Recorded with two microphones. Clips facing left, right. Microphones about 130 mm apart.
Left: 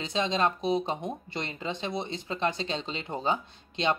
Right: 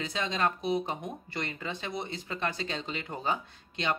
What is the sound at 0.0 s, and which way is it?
Speech, 25° left (ahead or behind).